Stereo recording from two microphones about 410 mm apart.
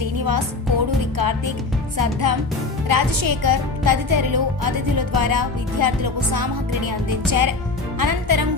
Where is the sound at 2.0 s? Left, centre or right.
Right.